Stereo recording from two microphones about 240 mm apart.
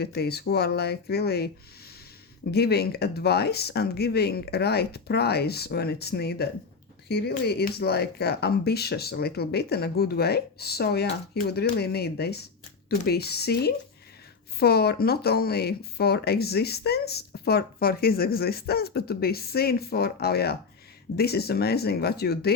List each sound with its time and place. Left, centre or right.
0.0 s speech: left
2.5 s speech: left